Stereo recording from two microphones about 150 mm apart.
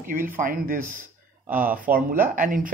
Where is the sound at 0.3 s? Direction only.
70° right (ahead or behind).